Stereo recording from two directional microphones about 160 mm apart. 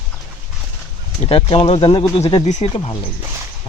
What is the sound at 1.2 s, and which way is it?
Speech, 35° left (ahead or behind).